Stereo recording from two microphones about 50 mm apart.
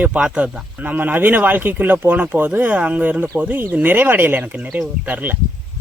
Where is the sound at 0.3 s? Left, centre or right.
Right.